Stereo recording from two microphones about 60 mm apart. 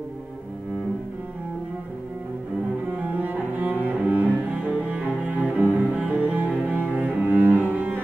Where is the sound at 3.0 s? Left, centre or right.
Right.